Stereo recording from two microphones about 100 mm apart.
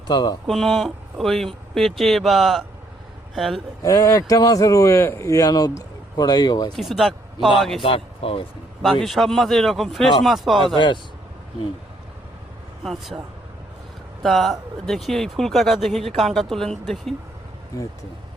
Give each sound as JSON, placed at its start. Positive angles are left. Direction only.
{"t": 0.1, "sound": "speech", "side_deg": 45}
{"t": 0.4, "sound": "speech", "side_deg": 5}
{"t": 3.8, "sound": "a man's voice", "side_deg": 35}
{"t": 6.7, "sound": "speech", "side_deg": 0}
{"t": 7.8, "sound": "speech", "side_deg": 70}
{"t": 8.8, "sound": "speech", "side_deg": 0}
{"t": 10.8, "sound": "speech", "side_deg": 50}
{"t": 12.8, "sound": "speech", "side_deg": 0}
{"t": 14.2, "sound": "speech", "side_deg": 0}